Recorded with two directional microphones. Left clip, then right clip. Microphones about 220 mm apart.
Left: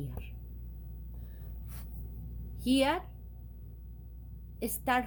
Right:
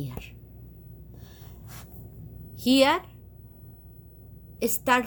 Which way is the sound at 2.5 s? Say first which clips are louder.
Right 8 dB; 25° right (ahead or behind).